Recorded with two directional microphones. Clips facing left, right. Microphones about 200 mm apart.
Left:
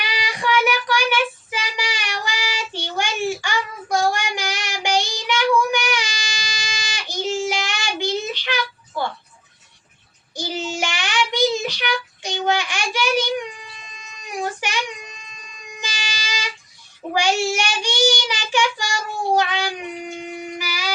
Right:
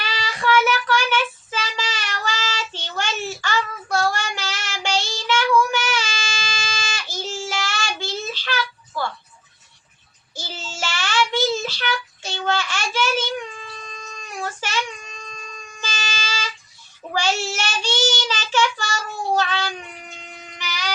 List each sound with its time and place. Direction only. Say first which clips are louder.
0.0 s child singing: even; 15° left (ahead or behind)
10.3 s child singing: left 9 dB; 15° left (ahead or behind)